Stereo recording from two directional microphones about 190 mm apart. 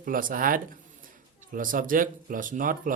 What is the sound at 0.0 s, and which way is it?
Speech, 45° right (ahead or behind).